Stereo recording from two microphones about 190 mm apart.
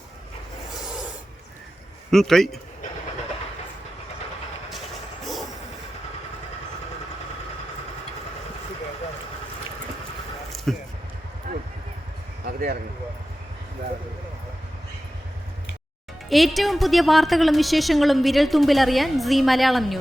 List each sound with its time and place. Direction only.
2.0 s a woman's voice: centre (ahead or behind)
5.2 s train: centre (ahead or behind)
10.5 s basketball bounce: centre (ahead or behind)
11.5 s a sound: 40° right (ahead or behind)
12.5 s a sound: 50° right (ahead or behind)
16.3 s a woman's voice: centre (ahead or behind)